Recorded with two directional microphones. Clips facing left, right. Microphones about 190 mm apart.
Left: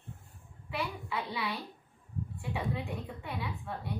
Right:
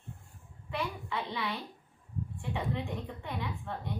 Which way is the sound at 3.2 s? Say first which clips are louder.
Right 1 dB; 10° left (ahead or behind).